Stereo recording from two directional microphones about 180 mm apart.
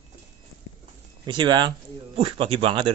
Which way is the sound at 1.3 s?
25° right (ahead or behind).